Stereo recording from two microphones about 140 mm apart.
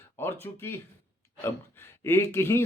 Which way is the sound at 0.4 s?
15° left (ahead or behind).